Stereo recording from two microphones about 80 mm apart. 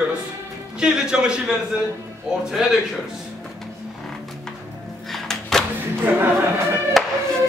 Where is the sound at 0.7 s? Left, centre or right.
Centre.